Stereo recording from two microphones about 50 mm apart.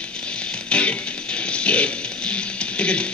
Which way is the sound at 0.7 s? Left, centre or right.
Left.